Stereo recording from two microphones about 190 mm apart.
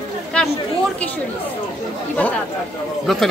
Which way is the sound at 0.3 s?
5° left (ahead or behind).